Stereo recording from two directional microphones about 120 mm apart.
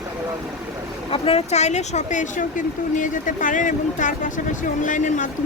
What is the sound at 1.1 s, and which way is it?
Speech, 55° left (ahead or behind).